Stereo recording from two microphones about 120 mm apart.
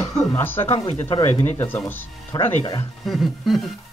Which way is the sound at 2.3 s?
35° left (ahead or behind).